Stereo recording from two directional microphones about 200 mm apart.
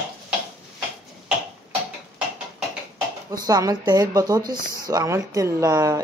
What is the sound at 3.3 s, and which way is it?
Speech, 15° right (ahead or behind).